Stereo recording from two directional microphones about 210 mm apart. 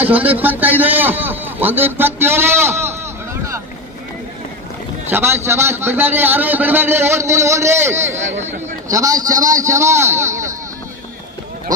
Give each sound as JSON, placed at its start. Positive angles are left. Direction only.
{"t": 0.0, "sound": "a man's voice", "side_deg": -10}
{"t": 5.1, "sound": "a man's voice", "side_deg": -10}
{"t": 8.2, "sound": "speech", "side_deg": -35}
{"t": 8.8, "sound": "a man's voice", "side_deg": -15}